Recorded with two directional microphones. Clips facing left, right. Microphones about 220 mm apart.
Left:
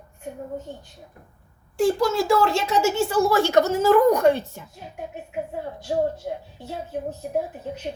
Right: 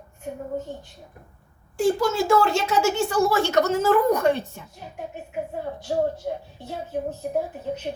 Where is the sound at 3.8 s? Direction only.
55° right (ahead or behind).